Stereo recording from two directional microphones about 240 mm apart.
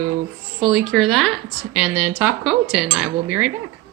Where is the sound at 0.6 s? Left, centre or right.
Centre.